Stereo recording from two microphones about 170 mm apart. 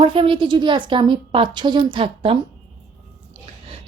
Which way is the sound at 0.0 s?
30° right (ahead or behind).